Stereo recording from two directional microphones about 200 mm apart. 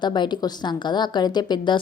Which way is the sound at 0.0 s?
20° left (ahead or behind).